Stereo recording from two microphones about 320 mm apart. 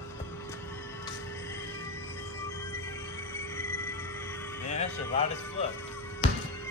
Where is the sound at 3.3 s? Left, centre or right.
Centre.